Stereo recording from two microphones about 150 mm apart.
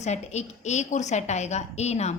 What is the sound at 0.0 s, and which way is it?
A woman's voice, 50° left (ahead or behind).